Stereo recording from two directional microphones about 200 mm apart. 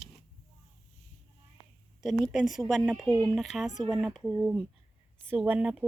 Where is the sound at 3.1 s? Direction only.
15° right (ahead or behind).